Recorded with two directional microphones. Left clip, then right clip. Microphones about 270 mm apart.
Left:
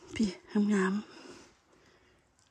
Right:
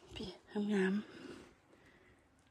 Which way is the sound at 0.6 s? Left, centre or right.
Centre.